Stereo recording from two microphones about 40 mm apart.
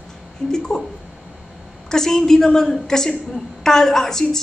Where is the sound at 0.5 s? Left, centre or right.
Centre.